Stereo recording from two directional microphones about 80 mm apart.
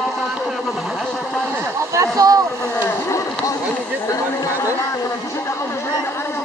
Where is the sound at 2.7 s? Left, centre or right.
Left.